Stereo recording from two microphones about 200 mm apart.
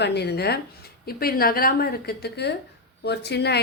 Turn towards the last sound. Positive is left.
turn(degrees=55)  # may be behind; listen again after turning